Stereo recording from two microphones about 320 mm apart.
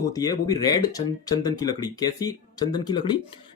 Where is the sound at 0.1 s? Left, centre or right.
Centre.